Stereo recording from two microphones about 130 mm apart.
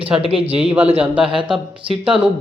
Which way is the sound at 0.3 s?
45° right (ahead or behind).